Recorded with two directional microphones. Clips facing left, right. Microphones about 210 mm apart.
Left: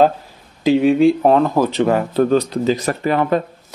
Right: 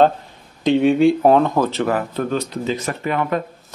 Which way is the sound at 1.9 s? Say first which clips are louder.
Left 6 dB; 30° left (ahead or behind).